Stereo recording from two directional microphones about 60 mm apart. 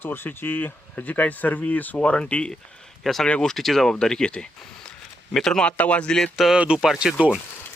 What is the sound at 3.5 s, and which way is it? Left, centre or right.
Speech, centre.